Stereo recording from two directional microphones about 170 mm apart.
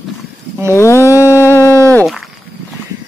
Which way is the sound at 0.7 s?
15° left (ahead or behind).